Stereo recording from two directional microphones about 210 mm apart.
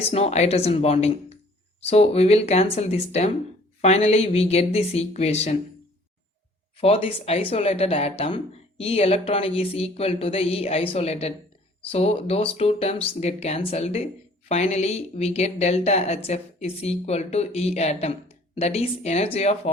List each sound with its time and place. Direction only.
0.1 s speech: 30° left (ahead or behind)
6.7 s speech: 30° left (ahead or behind)